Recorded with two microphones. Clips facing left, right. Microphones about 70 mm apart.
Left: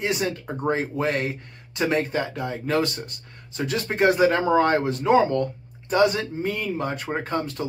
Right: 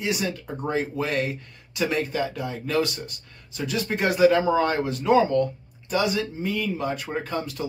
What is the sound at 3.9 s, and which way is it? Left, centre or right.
Speech, left.